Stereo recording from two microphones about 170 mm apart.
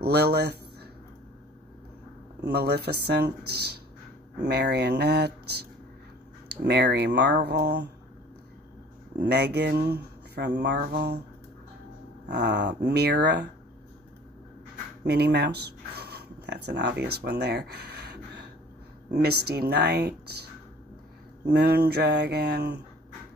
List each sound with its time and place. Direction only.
0.0 s speech: 75° right (ahead or behind)
2.4 s speech: 70° right (ahead or behind)
9.2 s speech: 75° right (ahead or behind)
12.3 s speech: 85° right
15.0 s speech: 70° right (ahead or behind)
21.5 s speech: 70° right (ahead or behind)